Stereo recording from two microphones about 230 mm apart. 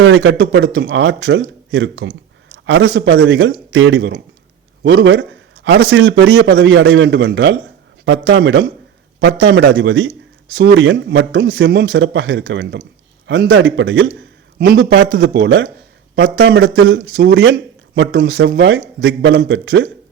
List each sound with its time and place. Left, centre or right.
0.0 s a man's voice: right